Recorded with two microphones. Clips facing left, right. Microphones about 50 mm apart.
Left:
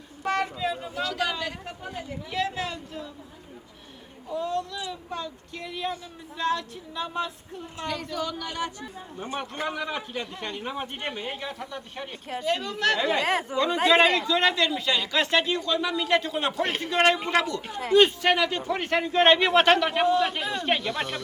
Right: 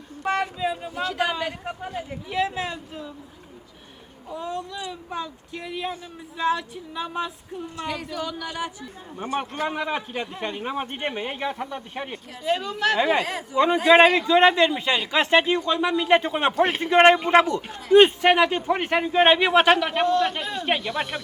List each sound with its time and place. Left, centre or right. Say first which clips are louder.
0.2 s vehicle: right 2 dB; centre
0.6 s speech: right 2 dB; centre
4.3 s a man's voice: left 2 dB; centre
9.1 s speech: right 5 dB; right
12.5 s a man's voice: right 2 dB; centre
13.2 s speech: left 5 dB; left
13.8 s speech: right 4 dB; right
16.6 s a man's voice: right 4 dB; centre
16.9 s a man's voice: right 7 dB; right; by 21.2 s centre